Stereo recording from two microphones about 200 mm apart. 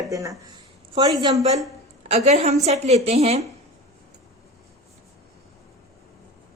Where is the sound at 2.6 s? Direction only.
35° right (ahead or behind).